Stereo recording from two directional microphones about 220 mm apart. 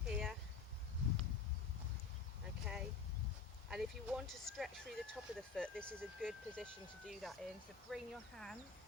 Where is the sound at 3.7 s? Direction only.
Centre (ahead or behind).